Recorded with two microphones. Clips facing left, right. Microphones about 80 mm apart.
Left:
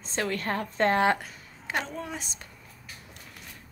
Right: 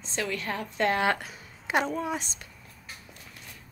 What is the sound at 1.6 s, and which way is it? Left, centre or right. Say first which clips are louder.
Speech: right 5 dB; centre.